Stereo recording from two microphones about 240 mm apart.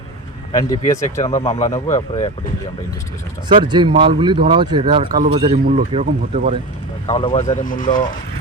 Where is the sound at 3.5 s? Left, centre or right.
Centre.